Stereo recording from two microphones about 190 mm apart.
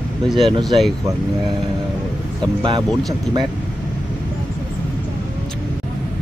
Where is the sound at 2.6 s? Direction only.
25° right (ahead or behind).